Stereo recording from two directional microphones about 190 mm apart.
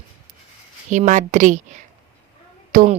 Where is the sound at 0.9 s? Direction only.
40° right (ahead or behind).